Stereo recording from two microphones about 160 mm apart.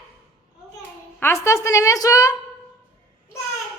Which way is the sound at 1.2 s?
15° left (ahead or behind).